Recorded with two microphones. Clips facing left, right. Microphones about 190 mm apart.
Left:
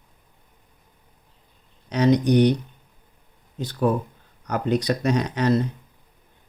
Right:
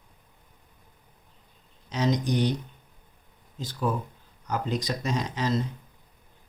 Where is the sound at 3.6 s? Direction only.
60° left (ahead or behind).